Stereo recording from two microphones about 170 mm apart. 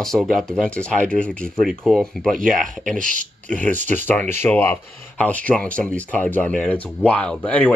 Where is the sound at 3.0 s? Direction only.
50° right (ahead or behind).